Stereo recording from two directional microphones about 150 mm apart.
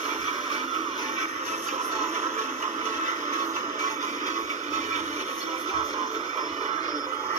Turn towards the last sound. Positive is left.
turn(degrees=-45)  # may be behind; listen again after turning